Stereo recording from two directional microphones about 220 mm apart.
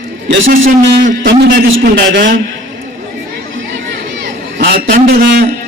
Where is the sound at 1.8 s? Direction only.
45° right (ahead or behind).